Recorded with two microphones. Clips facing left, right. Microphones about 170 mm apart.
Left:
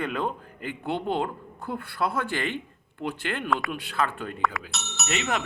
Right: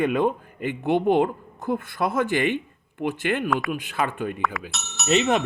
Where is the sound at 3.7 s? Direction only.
15° right (ahead or behind).